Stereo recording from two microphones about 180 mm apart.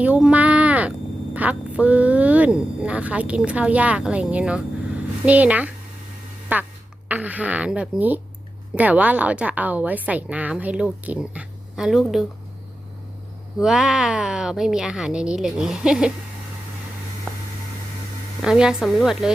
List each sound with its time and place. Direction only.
0.0 s speech: 5° right (ahead or behind)
13.6 s a woman's voice: 5° right (ahead or behind)
18.4 s a woman's voice: 5° right (ahead or behind)